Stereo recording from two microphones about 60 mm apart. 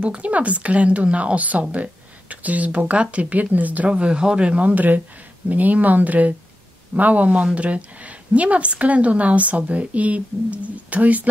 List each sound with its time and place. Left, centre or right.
0.0 s a woman's voice: right
3.9 s a woman's voice: centre